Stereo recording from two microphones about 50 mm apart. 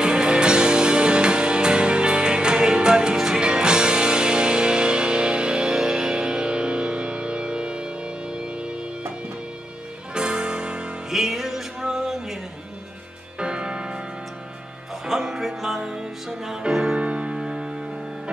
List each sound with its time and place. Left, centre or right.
0.0 s music: centre
10.1 s music: centre
11.1 s music: centre
13.4 s music: centre
15.0 s music: centre